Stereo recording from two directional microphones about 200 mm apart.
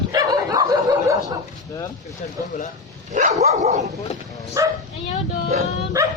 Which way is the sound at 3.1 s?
35° right (ahead or behind).